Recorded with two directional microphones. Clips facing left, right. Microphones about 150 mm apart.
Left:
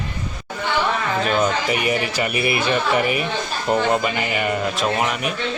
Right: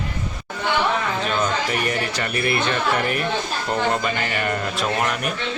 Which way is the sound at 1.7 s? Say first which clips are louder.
Left 3 dB; 5° left (ahead or behind).